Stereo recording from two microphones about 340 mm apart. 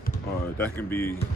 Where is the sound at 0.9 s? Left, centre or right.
Centre.